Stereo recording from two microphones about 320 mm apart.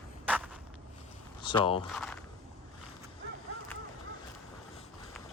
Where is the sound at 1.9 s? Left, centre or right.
Centre.